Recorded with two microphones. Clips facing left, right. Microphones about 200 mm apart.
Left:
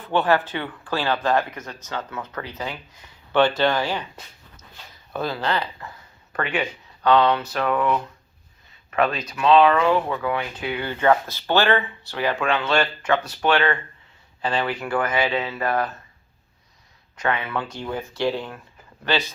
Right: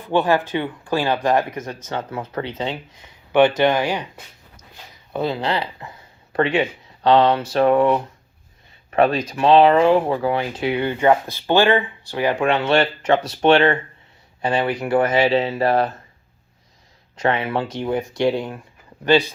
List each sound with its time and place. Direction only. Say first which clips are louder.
0.1 s speech: right 2 dB; 10° right (ahead or behind)
5.1 s speech: right 3 dB; 25° right (ahead or behind)
10.8 s speech: right 1 dB; 15° right (ahead or behind)
17.2 s speech: right 5 dB; 30° right (ahead or behind)